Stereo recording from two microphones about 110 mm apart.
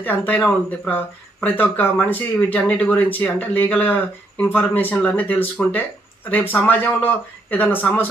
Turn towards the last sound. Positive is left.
turn(degrees=15)  # may be behind; listen again after turning